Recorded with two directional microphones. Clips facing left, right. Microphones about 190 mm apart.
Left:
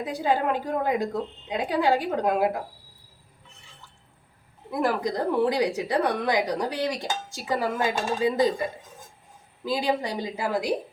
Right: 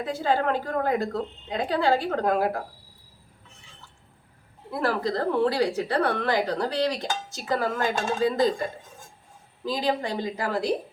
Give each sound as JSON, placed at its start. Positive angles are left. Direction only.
{"t": 0.0, "sound": "a woman's voice", "side_deg": 15}
{"t": 4.7, "sound": "a woman's voice", "side_deg": 15}
{"t": 9.6, "sound": "a woman's voice", "side_deg": 10}